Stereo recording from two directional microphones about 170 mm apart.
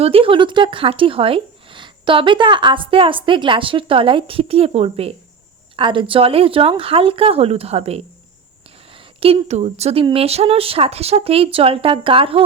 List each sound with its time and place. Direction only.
0.0 s speech: 35° right (ahead or behind)